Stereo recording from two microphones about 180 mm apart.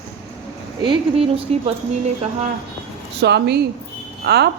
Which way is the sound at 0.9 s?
30° right (ahead or behind).